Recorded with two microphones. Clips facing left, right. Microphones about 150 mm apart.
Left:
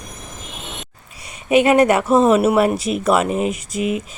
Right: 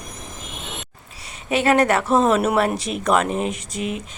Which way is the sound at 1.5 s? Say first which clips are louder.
Left 4 dB; 15° left (ahead or behind).